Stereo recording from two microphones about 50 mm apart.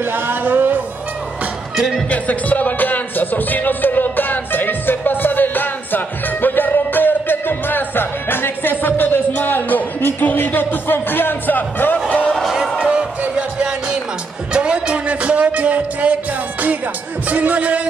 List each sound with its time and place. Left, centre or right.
0.0 s a sound: right
2.0 s music: left
12.4 s music: centre
12.7 s music: right
17.3 s music: right